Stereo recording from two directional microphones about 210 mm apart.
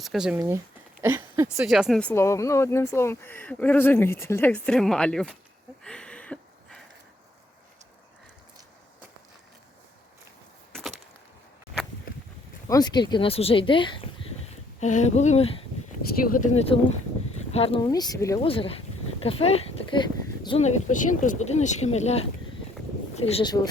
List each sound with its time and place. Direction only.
0.0 s speech: centre (ahead or behind)
0.3 s speech: 15° right (ahead or behind)
5.8 s a sound: 5° left (ahead or behind)
10.8 s a sound: centre (ahead or behind)
12.6 s speech: 15° left (ahead or behind)
14.8 s speech: 35° left (ahead or behind)
16.2 s speech: 40° left (ahead or behind); by 18.3 s 15° left (ahead or behind)
18.3 s speech: 25° left (ahead or behind)